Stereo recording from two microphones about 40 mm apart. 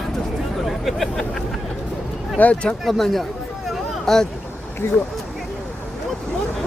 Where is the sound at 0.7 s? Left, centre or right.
Centre.